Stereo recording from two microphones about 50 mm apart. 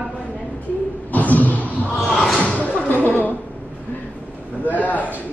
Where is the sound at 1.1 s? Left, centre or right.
Left.